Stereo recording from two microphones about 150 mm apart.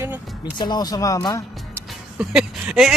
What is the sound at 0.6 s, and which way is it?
Speech, 25° left (ahead or behind).